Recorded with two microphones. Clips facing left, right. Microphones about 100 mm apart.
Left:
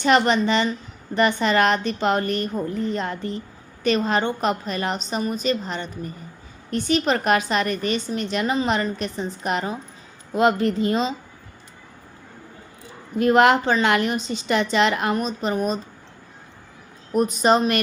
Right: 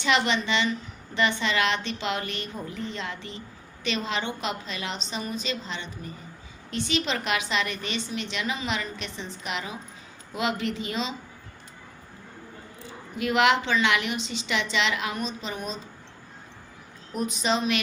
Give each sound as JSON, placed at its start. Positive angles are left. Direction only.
{"t": 0.0, "sound": "a woman's voice", "side_deg": 45}
{"t": 13.1, "sound": "a woman's voice", "side_deg": 45}
{"t": 17.1, "sound": "a woman's voice", "side_deg": 45}